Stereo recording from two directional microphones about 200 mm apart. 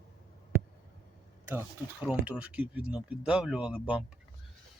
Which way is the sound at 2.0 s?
5° right (ahead or behind).